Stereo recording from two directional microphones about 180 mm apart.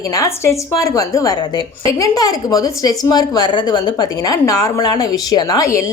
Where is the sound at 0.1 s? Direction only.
15° left (ahead or behind).